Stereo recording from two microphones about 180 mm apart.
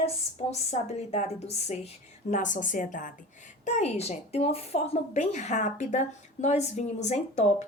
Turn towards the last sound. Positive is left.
turn(degrees=40)  # may be behind; listen again after turning